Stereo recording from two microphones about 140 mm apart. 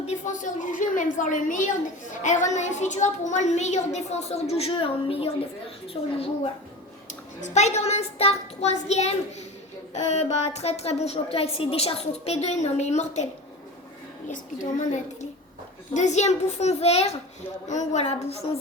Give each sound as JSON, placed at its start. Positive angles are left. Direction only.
{"t": 0.0, "sound": "a woman's voice", "side_deg": 60}
{"t": 7.1, "sound": "a woman's voice", "side_deg": 55}
{"t": 14.3, "sound": "a woman's voice", "side_deg": 65}